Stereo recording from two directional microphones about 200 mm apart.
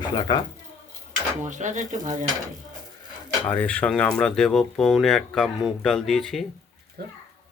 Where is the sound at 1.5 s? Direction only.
40° right (ahead or behind).